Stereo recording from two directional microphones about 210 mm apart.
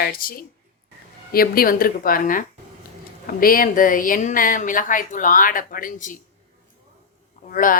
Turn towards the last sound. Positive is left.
turn(degrees=40)  # may be behind; listen again after turning